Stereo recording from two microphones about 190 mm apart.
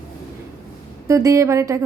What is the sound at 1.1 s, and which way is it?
Speech, 15° right (ahead or behind).